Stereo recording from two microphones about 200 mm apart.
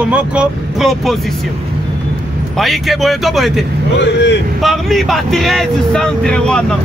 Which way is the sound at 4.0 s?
60° left (ahead or behind).